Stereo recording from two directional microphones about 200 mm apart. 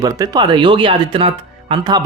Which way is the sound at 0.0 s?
20° right (ahead or behind).